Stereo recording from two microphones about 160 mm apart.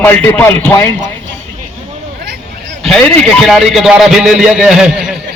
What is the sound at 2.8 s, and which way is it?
A man's voice, 5° left (ahead or behind).